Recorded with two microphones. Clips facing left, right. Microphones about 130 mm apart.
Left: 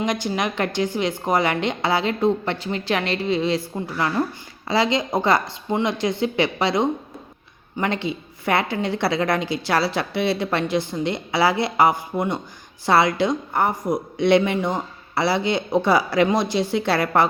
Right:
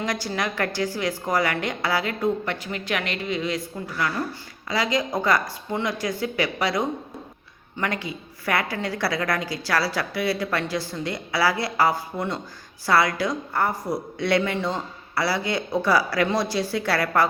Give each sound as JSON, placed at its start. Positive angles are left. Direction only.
{"t": 0.0, "sound": "a woman's voice", "side_deg": 20}